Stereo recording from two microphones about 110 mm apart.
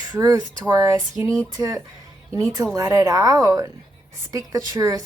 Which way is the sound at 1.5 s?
35° right (ahead or behind).